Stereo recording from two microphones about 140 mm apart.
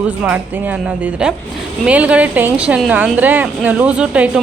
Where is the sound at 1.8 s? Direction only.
10° right (ahead or behind).